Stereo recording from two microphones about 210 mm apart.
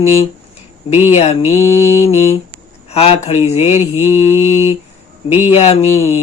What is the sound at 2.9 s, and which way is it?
Speech, 30° left (ahead or behind).